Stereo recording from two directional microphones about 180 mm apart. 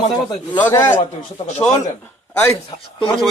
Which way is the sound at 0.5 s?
10° left (ahead or behind).